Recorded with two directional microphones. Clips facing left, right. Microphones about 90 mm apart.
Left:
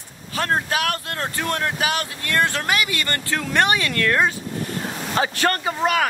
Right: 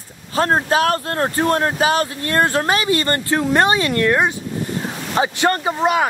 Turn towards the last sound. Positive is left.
turn(degrees=-20)  # may be behind; listen again after turning